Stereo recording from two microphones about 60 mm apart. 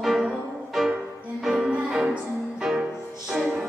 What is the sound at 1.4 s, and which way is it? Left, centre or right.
Music, centre.